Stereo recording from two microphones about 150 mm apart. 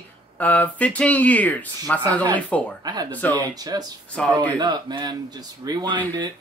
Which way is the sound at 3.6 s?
25° right (ahead or behind).